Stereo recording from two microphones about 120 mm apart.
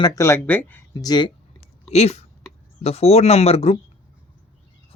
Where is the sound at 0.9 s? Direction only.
35° left (ahead or behind).